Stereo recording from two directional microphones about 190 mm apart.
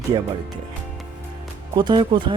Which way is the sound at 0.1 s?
25° right (ahead or behind).